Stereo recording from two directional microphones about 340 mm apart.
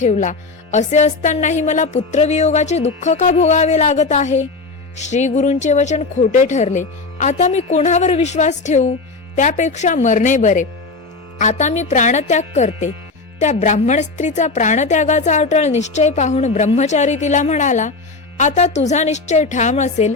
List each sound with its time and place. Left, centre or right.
0.0 s speech: left